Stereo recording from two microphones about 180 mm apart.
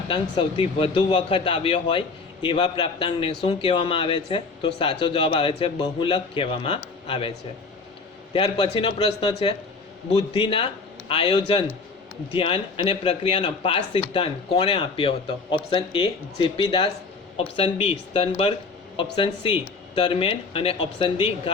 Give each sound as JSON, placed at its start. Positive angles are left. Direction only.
{"t": 0.1, "sound": "speech", "side_deg": 30}